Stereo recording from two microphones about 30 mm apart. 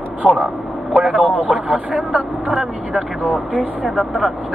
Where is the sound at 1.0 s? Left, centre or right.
Right.